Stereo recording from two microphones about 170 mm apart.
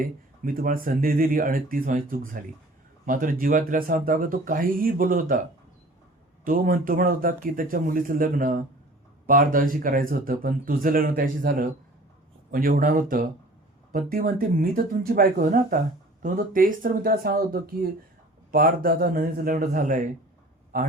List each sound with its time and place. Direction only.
0.0 s speech: 55° right (ahead or behind)
6.4 s speech: 55° right (ahead or behind)